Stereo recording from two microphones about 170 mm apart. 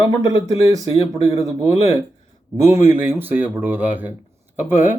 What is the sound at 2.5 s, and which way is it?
Speech, 20° right (ahead or behind).